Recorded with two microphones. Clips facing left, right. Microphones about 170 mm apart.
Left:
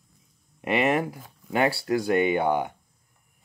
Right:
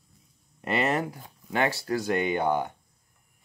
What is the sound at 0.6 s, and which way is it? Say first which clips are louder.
Speech: left 3 dB; 10° left (ahead or behind).